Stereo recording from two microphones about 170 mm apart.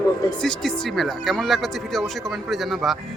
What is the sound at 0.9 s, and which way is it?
Speech, centre (ahead or behind).